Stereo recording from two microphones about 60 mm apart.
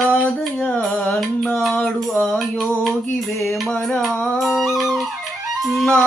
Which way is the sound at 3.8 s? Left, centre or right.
Centre.